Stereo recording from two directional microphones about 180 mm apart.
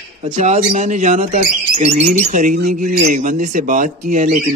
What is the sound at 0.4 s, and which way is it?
Speech, 40° right (ahead or behind).